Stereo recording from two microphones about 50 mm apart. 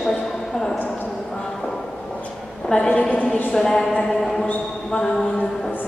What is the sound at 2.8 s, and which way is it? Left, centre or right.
Speech, left.